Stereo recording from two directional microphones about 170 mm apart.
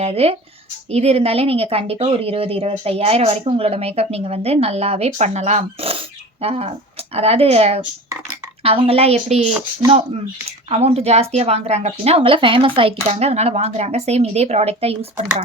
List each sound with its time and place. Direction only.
0.0 s a woman's voice: 35° right (ahead or behind)
10.7 s a woman's voice: 40° right (ahead or behind)